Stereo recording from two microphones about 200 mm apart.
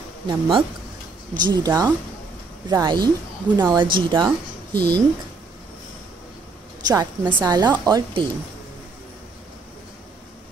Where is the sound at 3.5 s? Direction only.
10° right (ahead or behind).